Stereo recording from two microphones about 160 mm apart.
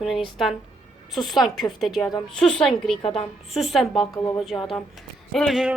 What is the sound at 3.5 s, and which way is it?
Speech, centre (ahead or behind).